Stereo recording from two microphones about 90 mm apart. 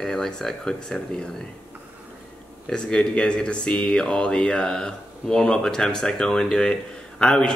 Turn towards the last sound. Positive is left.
turn(degrees=10)  # may be behind; listen again after turning